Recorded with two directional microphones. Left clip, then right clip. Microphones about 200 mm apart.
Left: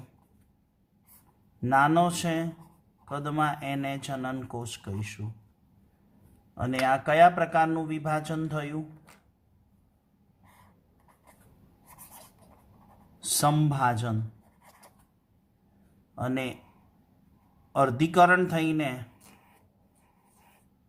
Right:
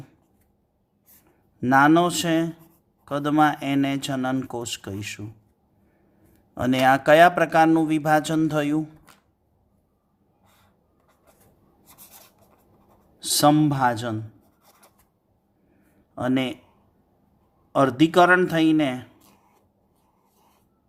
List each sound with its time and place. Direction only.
1.6 s a man's voice: 40° right (ahead or behind)
6.5 s a man's voice: 45° right (ahead or behind)
13.1 s a man's voice: 30° right (ahead or behind)
16.1 s a man's voice: 35° right (ahead or behind)
17.7 s a man's voice: 35° right (ahead or behind)